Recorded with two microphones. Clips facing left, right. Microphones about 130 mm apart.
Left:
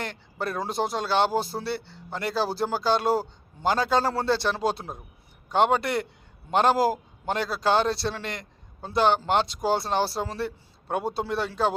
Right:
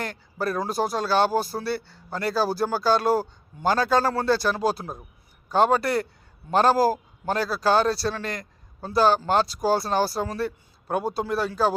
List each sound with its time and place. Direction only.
0.0 s a man's voice: 25° left (ahead or behind)